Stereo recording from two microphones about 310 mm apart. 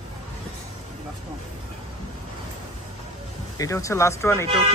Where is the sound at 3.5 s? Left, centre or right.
Centre.